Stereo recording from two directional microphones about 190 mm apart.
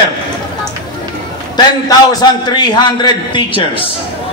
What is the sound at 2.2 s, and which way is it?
A man's voice, 20° left (ahead or behind).